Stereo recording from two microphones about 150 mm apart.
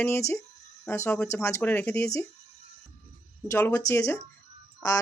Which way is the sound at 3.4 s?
20° left (ahead or behind).